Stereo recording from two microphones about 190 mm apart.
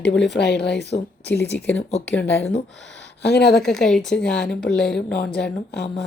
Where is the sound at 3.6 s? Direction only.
5° left (ahead or behind).